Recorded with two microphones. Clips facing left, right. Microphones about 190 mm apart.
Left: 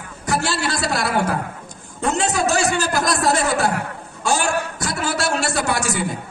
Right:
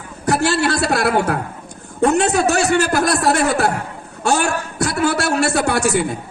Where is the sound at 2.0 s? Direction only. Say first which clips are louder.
Right 6 dB; 60° right (ahead or behind).